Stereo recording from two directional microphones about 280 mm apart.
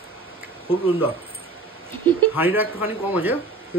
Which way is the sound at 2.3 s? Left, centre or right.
Centre.